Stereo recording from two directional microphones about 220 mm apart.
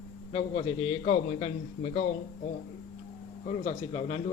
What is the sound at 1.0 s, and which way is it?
A man's voice, 30° left (ahead or behind).